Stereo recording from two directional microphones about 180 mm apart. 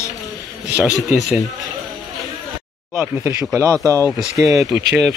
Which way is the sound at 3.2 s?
20° right (ahead or behind).